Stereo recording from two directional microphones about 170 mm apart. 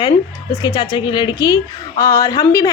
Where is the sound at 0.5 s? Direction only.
20° left (ahead or behind).